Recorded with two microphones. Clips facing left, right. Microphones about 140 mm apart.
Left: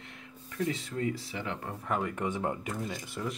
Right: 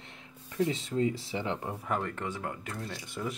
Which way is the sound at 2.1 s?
20° left (ahead or behind).